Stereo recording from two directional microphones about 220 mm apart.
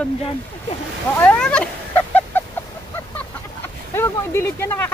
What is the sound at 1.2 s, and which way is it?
Speech, 5° left (ahead or behind).